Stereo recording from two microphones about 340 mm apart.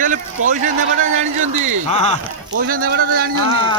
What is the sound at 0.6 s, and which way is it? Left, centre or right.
Speech, right.